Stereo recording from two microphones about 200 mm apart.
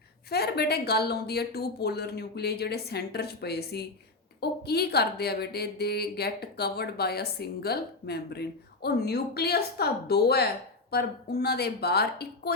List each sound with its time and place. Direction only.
0.3 s a woman's voice: 55° left (ahead or behind)